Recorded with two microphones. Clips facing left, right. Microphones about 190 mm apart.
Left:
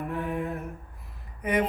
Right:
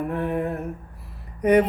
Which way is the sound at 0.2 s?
45° right (ahead or behind).